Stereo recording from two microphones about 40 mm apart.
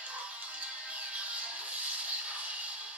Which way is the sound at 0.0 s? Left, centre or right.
Right.